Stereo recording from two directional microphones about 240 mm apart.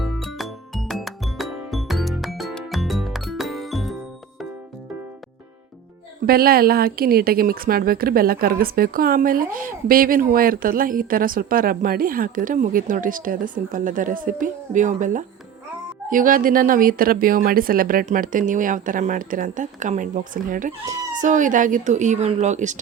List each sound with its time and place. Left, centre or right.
0.0 s music: centre
6.2 s speech: right